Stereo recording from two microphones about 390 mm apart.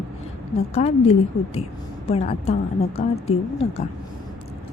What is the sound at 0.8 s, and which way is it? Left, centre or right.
Speech, centre.